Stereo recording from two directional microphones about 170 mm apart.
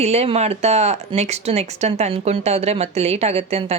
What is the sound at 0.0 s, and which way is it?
Speech, 40° right (ahead or behind).